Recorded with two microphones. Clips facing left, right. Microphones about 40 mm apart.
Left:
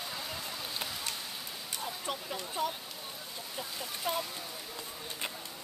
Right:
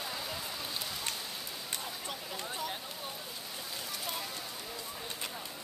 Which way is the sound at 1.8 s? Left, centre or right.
Centre.